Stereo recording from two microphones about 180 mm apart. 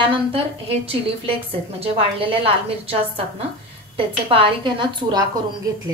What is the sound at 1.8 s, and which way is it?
A woman's voice, 30° right (ahead or behind).